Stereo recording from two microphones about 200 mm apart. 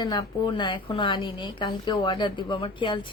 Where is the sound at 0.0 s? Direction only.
20° left (ahead or behind).